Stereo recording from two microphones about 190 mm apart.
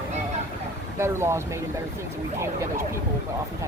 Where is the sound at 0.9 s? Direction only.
15° right (ahead or behind).